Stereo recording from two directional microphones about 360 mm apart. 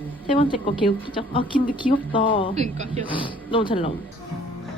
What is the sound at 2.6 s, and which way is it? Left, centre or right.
Speech, centre.